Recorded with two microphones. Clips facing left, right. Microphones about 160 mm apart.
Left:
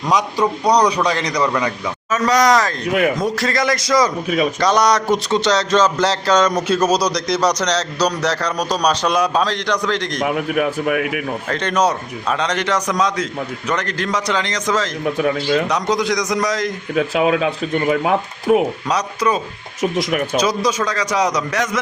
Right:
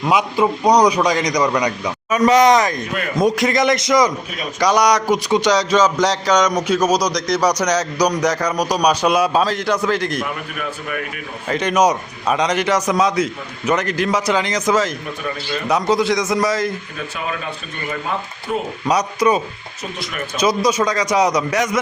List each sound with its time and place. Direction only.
0.0 s a man's voice: 10° right (ahead or behind)
10.2 s speech: 80° left
11.4 s a man's voice: 10° right (ahead or behind)
15.0 s speech: 80° left
15.7 s a man's voice: 5° right (ahead or behind)
16.9 s speech: 90° left
18.9 s a man's voice: 10° right (ahead or behind)
19.8 s speech: 85° left
20.4 s a man's voice: 10° right (ahead or behind)